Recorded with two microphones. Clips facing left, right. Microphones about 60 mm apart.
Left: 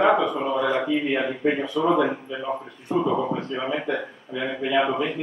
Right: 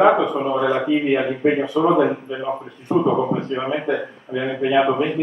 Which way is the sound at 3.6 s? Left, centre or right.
Centre.